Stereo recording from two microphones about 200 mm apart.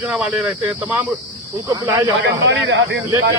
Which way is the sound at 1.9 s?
20° right (ahead or behind).